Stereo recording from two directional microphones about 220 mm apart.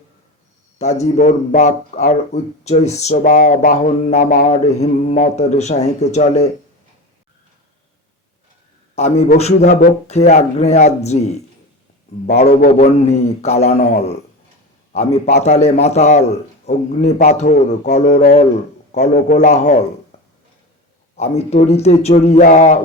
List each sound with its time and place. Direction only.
0.8 s speech: 30° left (ahead or behind)
9.0 s a man's voice: 30° left (ahead or behind)
15.4 s speech: 30° left (ahead or behind)
21.2 s a man's voice: 30° left (ahead or behind)